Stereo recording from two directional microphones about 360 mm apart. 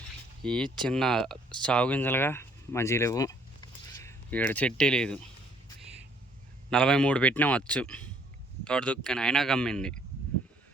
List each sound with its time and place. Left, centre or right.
0.4 s a man's voice: centre
6.7 s a man's voice: centre